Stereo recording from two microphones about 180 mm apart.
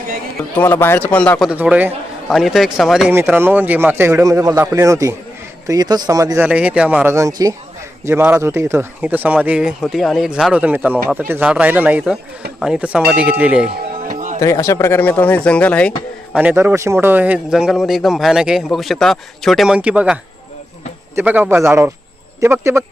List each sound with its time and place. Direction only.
0.5 s speech: 10° left (ahead or behind)
1.5 s speech: 5° right (ahead or behind)
3.1 s speech: 10° right (ahead or behind)
14.1 s music: 45° right (ahead or behind)
14.3 s speech: 15° left (ahead or behind)
16.3 s speech: 10° right (ahead or behind)
21.2 s speech: 10° right (ahead or behind)